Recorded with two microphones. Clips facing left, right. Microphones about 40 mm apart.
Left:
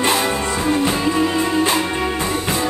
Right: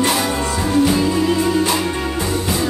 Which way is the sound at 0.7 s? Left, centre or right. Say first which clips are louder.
Right 3 dB; left.